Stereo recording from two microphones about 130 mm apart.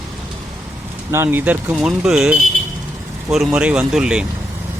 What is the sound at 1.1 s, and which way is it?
Speech, 20° right (ahead or behind).